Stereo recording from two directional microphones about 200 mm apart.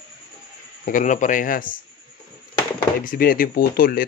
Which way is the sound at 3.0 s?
45° left (ahead or behind).